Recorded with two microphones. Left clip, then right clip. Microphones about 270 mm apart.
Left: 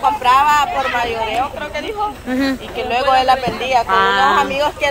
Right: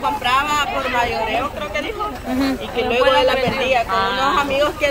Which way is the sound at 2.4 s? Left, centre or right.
Centre.